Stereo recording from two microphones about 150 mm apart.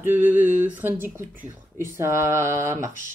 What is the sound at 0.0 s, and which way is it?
Speech, 15° right (ahead or behind).